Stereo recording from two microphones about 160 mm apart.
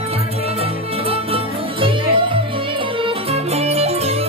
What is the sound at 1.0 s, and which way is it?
Music, 35° right (ahead or behind).